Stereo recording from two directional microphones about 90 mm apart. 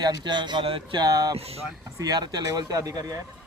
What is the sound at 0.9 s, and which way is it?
Speech, 45° right (ahead or behind).